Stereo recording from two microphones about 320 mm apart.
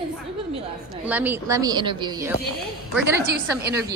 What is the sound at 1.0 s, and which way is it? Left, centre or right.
A woman's voice, centre.